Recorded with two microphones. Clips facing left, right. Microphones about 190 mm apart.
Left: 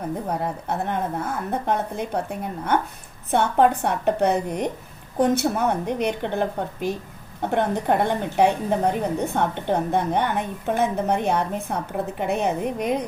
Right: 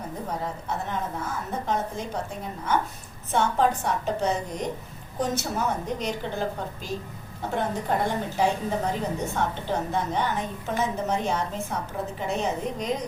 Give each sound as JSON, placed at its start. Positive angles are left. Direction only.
{"t": 0.3, "sound": "a woman's voice", "side_deg": 60}